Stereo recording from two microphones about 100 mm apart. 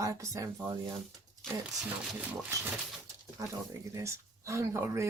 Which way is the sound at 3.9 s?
30° right (ahead or behind).